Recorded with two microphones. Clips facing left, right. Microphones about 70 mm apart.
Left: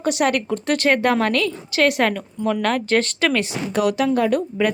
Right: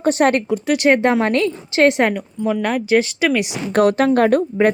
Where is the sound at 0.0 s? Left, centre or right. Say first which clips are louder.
Right 4 dB; right.